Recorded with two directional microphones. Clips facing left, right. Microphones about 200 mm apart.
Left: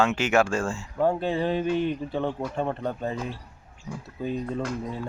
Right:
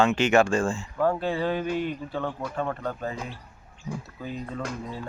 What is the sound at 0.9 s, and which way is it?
A man's voice, 20° left (ahead or behind).